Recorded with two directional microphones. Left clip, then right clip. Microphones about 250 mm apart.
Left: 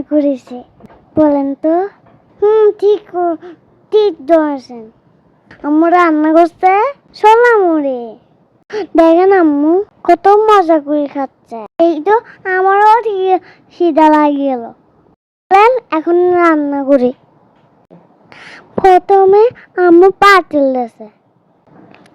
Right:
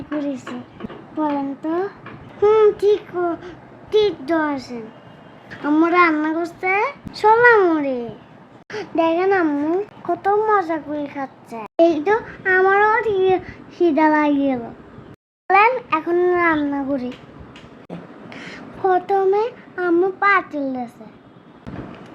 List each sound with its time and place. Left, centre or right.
0.2 s speech: left
0.8 s a sound: centre
1.2 s speech: left
18.3 s a woman's voice: left